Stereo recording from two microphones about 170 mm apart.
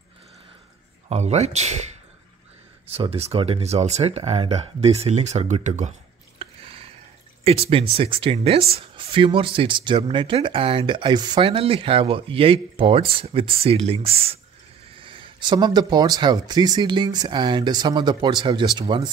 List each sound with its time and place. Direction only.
1.0 s speech: 40° right (ahead or behind)
2.9 s speech: 35° right (ahead or behind)